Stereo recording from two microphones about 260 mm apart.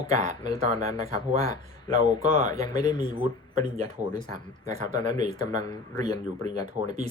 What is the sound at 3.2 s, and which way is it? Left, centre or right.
Speech, right.